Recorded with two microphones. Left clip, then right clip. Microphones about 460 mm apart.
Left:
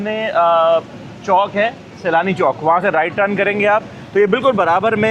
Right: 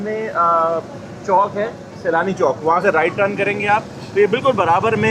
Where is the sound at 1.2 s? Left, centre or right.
Left.